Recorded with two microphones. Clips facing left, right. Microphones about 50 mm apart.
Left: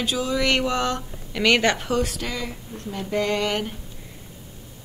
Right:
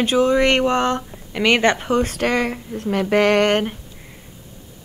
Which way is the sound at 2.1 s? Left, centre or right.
Right.